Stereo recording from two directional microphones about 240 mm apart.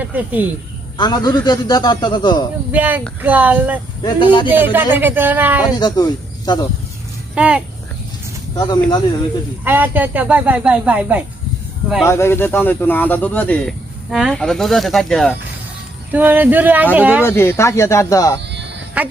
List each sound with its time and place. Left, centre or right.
0.0 s speech: centre
0.9 s speech: centre
2.7 s speech: centre
4.0 s speech: centre
4.4 s speech: centre
5.8 s speech: centre
7.3 s speech: centre
8.5 s speech: centre
9.6 s speech: centre
12.0 s speech: centre
17.2 s speech: centre
19.0 s a woman's voice: centre